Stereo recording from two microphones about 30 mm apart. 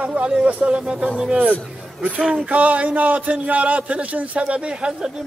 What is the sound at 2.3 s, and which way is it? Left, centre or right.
A man's voice, right.